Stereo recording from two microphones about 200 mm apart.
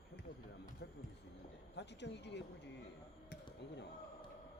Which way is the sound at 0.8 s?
55° left (ahead or behind).